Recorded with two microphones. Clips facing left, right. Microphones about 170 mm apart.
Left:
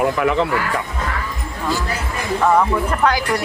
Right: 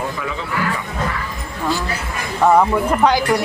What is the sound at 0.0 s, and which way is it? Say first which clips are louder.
Speech: left 8 dB; 70° left (ahead or behind).